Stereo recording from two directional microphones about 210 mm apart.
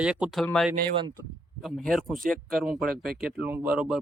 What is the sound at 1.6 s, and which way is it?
Speech, centre (ahead or behind).